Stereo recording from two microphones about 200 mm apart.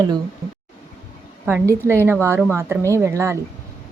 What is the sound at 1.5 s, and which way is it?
A woman's voice, 10° right (ahead or behind).